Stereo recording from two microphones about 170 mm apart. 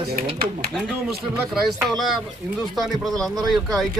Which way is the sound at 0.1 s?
65° right (ahead or behind).